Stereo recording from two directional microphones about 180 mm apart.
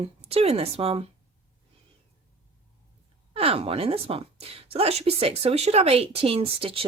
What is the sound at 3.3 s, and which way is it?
A woman's voice, 30° right (ahead or behind).